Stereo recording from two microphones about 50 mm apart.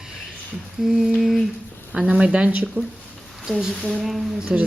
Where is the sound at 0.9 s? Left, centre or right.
Centre.